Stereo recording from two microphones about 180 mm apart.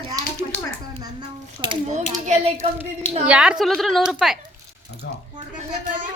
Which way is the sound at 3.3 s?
5° right (ahead or behind).